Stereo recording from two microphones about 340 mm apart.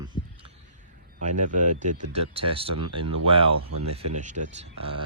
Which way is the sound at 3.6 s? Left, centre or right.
Right.